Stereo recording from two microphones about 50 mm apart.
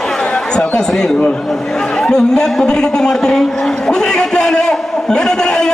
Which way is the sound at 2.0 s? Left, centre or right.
Centre.